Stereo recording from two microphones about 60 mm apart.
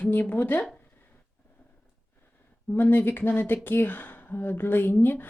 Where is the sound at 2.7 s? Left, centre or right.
Left.